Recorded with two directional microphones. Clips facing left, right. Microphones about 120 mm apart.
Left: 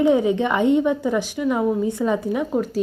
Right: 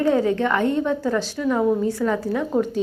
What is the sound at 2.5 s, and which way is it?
Speech, 5° left (ahead or behind).